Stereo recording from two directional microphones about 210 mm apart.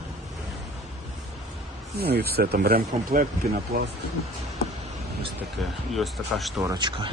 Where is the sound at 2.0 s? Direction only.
50° right (ahead or behind).